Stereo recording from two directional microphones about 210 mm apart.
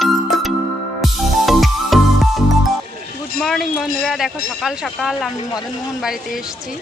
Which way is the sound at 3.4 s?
Centre (ahead or behind).